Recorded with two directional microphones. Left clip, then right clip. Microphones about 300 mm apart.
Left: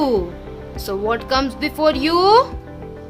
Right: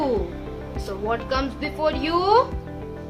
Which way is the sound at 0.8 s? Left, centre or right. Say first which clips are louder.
Left 6 dB; left.